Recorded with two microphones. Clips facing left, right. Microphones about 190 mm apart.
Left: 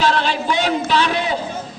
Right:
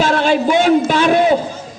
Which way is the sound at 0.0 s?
50° right (ahead or behind).